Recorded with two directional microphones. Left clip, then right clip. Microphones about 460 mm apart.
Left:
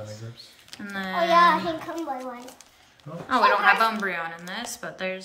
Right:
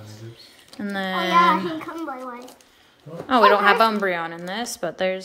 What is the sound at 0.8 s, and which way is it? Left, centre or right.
Speech, centre.